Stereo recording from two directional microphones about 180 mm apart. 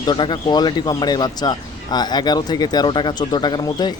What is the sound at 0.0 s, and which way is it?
Speech, 25° left (ahead or behind).